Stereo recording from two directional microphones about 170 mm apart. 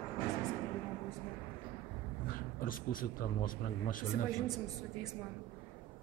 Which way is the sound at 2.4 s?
55° left (ahead or behind).